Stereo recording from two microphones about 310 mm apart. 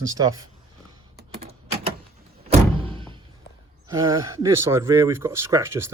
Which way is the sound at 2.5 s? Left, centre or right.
Centre.